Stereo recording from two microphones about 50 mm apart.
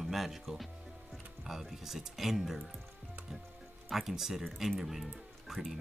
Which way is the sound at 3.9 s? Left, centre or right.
Centre.